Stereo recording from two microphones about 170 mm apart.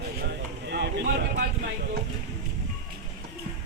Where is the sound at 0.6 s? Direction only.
90° right.